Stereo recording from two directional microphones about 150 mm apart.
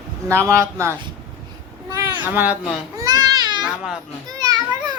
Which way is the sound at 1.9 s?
15° right (ahead or behind).